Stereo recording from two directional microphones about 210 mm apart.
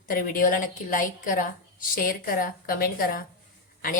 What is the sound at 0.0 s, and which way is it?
A woman's voice, 40° left (ahead or behind).